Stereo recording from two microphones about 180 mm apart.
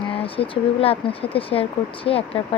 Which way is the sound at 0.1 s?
30° left (ahead or behind).